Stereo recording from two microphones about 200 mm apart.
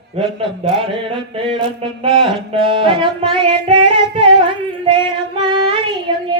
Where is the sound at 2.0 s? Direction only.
25° right (ahead or behind).